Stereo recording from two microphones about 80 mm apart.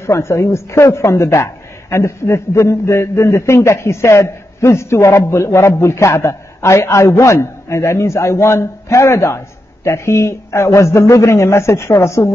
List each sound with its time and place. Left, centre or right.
0.0 s a woman's voice: left